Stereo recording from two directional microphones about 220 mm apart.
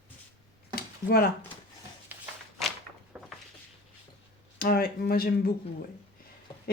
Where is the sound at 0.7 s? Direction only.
45° left (ahead or behind).